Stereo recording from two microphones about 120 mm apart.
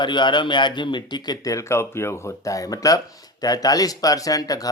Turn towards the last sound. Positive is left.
turn(degrees=30)  # may be behind; listen again after turning